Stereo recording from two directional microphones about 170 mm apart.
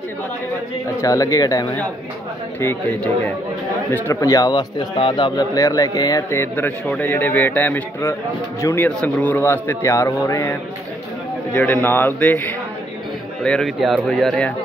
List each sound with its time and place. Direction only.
1.0 s a man's voice: 20° left (ahead or behind)
11.5 s a man's voice: 10° left (ahead or behind)